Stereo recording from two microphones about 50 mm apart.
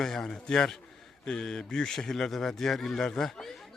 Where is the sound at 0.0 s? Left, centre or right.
Centre.